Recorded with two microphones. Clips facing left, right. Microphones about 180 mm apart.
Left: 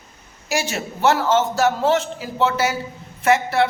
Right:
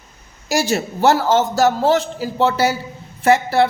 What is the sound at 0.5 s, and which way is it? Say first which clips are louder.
A man's voice: right 5 dB; 35° right (ahead or behind).